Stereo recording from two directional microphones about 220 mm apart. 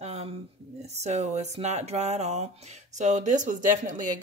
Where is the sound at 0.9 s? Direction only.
30° right (ahead or behind).